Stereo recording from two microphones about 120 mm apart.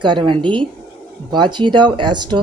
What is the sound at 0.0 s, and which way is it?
A woman's voice, 40° right (ahead or behind).